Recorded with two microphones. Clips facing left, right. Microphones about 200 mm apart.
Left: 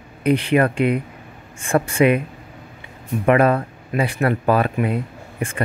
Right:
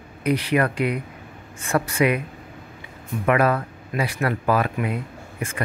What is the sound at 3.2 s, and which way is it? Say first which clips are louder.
Speech: left 4 dB; 30° left (ahead or behind).